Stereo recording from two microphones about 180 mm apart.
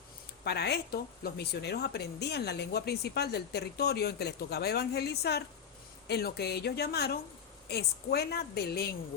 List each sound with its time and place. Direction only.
0.4 s a woman's voice: 65° left (ahead or behind)